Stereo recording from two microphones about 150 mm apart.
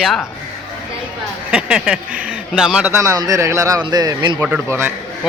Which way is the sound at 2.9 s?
20° right (ahead or behind).